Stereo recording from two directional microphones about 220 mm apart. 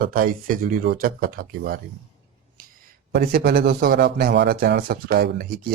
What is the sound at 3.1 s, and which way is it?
Speech, 45° right (ahead or behind).